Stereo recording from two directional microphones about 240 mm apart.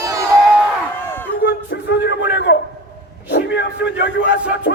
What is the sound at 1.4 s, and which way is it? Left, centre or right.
A man's voice, left.